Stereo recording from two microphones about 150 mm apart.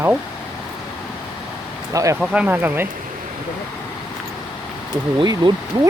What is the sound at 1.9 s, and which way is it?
Speech, 20° right (ahead or behind).